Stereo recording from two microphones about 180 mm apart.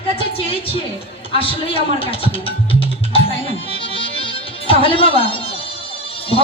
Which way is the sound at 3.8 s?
30° left (ahead or behind).